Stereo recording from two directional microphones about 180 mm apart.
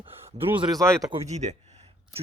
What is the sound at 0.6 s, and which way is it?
Speech, 20° right (ahead or behind).